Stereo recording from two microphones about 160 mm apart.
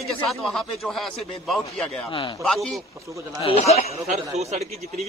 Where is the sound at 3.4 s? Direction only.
40° left (ahead or behind).